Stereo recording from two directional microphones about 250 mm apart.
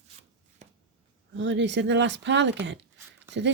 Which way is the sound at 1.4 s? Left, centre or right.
Right.